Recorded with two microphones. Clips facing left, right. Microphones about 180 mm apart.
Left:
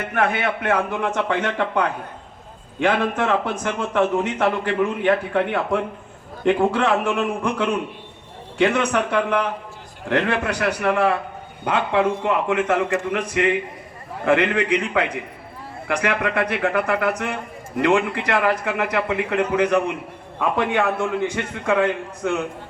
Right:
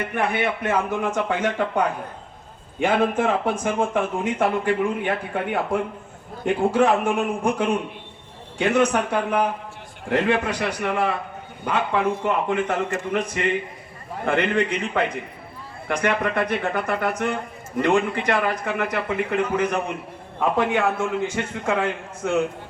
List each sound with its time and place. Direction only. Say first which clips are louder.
0.2 s a man's voice: left 2 dB; 65° left (ahead or behind); by 7.7 s 90° left
8.5 s a man's voice: even; 70° left (ahead or behind)